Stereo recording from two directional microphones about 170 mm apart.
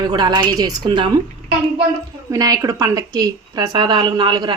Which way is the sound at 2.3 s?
20° right (ahead or behind).